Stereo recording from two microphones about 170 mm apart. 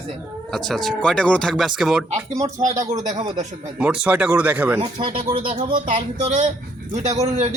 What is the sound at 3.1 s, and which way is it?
Speech, 25° right (ahead or behind).